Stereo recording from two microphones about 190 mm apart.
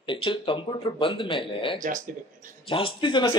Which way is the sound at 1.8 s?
45° right (ahead or behind).